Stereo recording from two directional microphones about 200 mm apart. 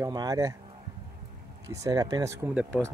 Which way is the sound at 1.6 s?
15° right (ahead or behind).